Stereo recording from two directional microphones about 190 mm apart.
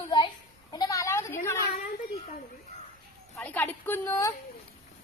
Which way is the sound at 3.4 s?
10° left (ahead or behind).